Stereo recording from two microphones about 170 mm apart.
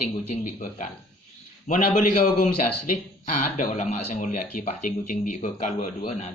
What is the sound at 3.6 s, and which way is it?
A man's voice, 50° left (ahead or behind).